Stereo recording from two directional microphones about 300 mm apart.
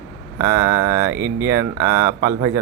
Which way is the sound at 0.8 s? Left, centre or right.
Centre.